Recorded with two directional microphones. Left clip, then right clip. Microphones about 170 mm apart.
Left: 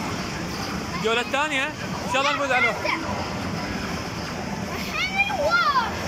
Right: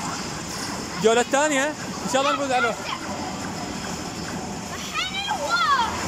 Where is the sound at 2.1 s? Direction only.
35° right (ahead or behind).